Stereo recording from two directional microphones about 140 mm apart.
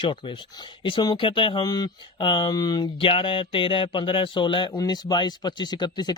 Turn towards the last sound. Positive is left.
turn(degrees=30)  # may be behind; listen again after turning